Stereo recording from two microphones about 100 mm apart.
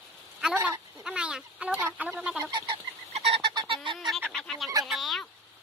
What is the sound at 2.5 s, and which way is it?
Frog, 55° right (ahead or behind).